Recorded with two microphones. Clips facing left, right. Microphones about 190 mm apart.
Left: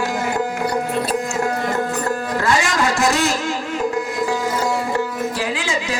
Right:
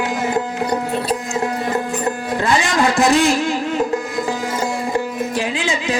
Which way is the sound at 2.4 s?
20° right (ahead or behind).